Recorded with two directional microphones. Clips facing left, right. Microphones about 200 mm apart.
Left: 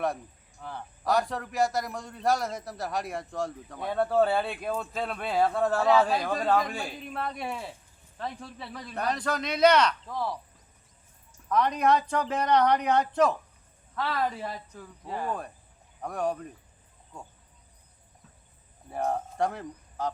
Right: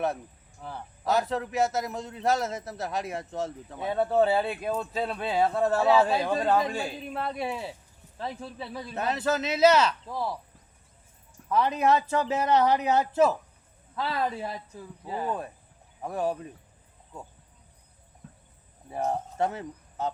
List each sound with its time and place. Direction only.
0.6 s a man's voice: 5° right (ahead or behind)
11.4 s a sound: 50° right (ahead or behind)
11.8 s a man's voice: 5° right (ahead or behind)
18.9 s speech: 5° right (ahead or behind)